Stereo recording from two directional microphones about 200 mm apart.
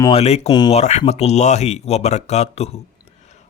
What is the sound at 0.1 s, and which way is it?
Speech, 30° left (ahead or behind).